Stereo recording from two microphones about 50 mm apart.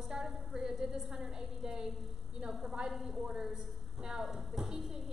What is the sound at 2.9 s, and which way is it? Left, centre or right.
A woman's voice, centre.